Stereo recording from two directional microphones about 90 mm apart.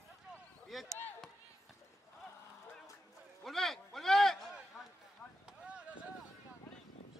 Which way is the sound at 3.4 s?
Centre (ahead or behind).